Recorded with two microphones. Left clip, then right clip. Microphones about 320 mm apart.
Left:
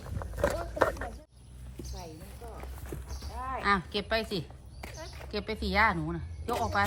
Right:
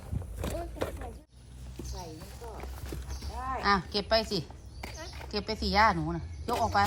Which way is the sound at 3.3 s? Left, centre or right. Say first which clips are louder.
Right 1 dB; right.